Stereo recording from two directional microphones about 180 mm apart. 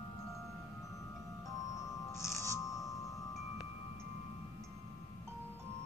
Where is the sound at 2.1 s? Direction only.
15° left (ahead or behind).